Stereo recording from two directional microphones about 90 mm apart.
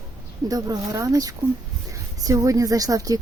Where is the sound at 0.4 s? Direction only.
45° right (ahead or behind).